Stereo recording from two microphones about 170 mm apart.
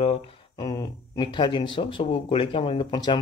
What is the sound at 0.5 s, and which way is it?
Speech, 25° left (ahead or behind).